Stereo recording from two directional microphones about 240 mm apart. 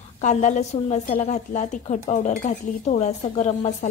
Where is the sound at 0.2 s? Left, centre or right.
Left.